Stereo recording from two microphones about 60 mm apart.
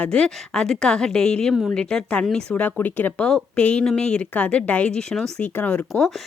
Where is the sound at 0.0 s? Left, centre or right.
Centre.